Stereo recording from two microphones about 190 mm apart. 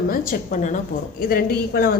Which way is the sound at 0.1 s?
45° left (ahead or behind).